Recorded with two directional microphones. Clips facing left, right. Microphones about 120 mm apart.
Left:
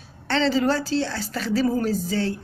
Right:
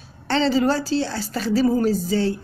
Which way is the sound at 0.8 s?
10° right (ahead or behind).